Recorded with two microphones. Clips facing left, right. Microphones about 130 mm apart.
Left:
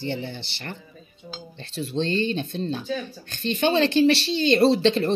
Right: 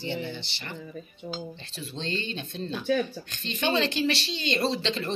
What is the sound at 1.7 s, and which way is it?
Speech, 35° left (ahead or behind).